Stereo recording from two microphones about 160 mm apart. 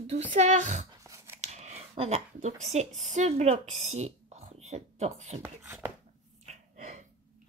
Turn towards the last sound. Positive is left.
turn(degrees=-45)  # may be behind; listen again after turning